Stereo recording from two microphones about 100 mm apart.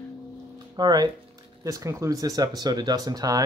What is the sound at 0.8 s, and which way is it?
Speech, 45° right (ahead or behind).